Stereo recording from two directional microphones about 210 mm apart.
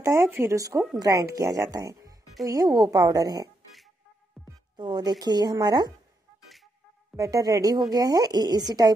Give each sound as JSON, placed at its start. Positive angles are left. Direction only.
{"t": 0.0, "sound": "a woman's voice", "side_deg": -15}
{"t": 4.7, "sound": "speech", "side_deg": -20}
{"t": 7.2, "sound": "a woman's voice", "side_deg": -15}